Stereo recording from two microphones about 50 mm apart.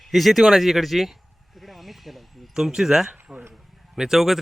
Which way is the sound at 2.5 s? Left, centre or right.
Centre.